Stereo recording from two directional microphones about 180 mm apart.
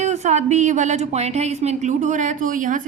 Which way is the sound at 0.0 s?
40° right (ahead or behind).